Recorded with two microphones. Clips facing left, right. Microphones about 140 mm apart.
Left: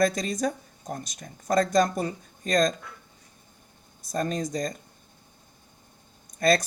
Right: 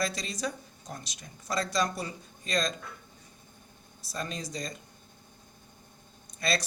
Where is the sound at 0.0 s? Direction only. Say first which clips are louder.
Left 8 dB; 50° left (ahead or behind).